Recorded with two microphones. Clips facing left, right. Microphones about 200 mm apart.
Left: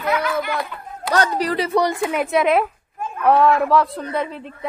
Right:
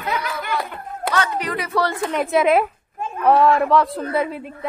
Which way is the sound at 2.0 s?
5° left (ahead or behind).